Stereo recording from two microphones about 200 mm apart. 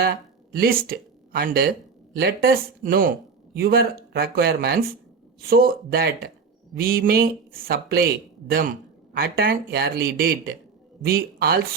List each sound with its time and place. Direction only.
0.5 s speech: 45° right (ahead or behind)